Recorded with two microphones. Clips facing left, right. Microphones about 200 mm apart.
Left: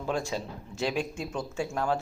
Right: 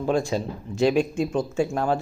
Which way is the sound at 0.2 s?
15° right (ahead or behind).